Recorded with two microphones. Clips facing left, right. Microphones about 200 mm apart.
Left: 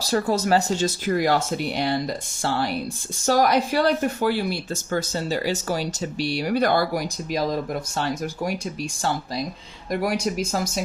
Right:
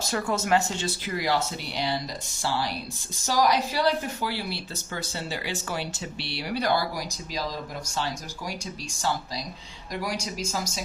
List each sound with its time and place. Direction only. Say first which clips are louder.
0.0 s speech: left 6 dB; 35° left (ahead or behind); by 10.8 s 55° left (ahead or behind)